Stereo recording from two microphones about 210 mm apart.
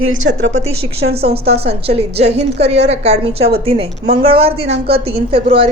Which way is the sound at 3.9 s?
45° right (ahead or behind).